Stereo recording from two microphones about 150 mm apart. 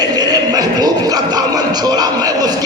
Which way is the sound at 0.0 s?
25° right (ahead or behind).